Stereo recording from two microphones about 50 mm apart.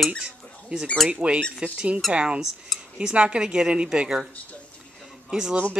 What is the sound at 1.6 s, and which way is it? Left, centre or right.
Speech, right.